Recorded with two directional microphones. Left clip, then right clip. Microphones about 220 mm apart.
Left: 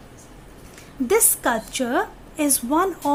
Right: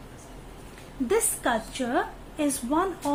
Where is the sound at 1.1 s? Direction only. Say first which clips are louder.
Left 5 dB; 40° left (ahead or behind).